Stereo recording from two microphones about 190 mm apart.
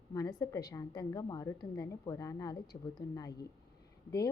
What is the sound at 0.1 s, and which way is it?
A woman's voice, 20° left (ahead or behind).